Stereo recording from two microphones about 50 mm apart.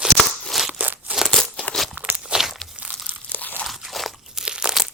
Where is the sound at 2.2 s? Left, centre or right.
Centre.